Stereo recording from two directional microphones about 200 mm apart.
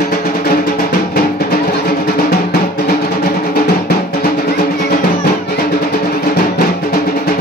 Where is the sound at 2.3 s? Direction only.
50° left (ahead or behind).